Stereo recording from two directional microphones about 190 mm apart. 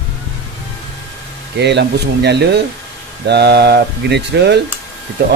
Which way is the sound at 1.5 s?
65° right (ahead or behind).